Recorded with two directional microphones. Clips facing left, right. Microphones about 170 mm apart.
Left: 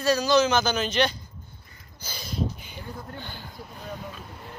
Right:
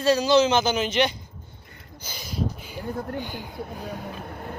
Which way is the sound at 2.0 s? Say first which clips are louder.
Even; 15° right (ahead or behind).